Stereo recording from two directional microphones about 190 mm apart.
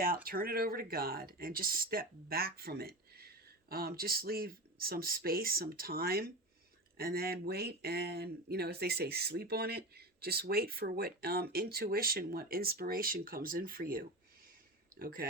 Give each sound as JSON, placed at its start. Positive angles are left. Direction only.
{"t": 0.3, "sound": "speech", "side_deg": -50}